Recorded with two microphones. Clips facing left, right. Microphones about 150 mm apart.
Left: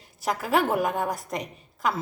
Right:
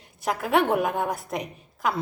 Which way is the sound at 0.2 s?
Centre (ahead or behind).